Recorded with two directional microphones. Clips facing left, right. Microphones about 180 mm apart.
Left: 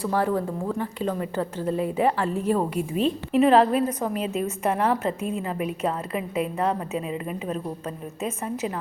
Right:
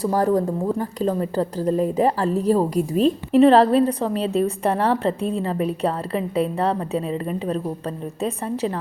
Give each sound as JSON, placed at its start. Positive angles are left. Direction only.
{"t": 0.0, "sound": "a woman's voice", "side_deg": -40}